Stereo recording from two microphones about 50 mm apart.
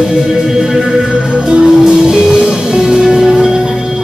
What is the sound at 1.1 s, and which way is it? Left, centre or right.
Music, centre.